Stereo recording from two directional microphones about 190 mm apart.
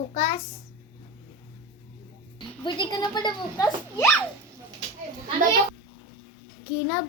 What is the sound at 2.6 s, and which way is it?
Speech, 25° left (ahead or behind).